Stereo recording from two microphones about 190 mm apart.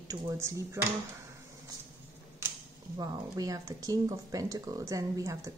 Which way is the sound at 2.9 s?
20° right (ahead or behind).